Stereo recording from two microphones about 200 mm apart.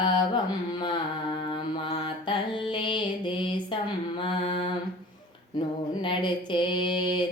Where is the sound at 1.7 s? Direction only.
30° left (ahead or behind).